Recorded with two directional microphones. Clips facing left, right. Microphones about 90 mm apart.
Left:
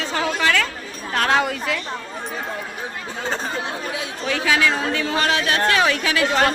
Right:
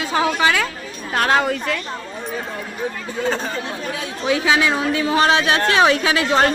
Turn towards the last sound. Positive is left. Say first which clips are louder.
# right 2 dB
turn(degrees=-30)  # may be behind; listen again after turning